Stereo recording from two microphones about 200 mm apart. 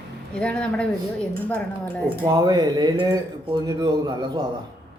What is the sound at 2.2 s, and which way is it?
Speech, 15° right (ahead or behind).